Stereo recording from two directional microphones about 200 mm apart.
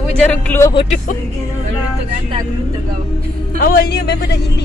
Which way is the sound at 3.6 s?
50° left (ahead or behind).